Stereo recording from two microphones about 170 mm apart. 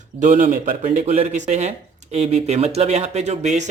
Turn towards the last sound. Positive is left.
turn(degrees=-45)  # may be behind; listen again after turning